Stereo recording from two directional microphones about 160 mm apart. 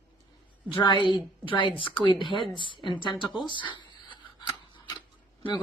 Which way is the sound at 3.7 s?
30° left (ahead or behind).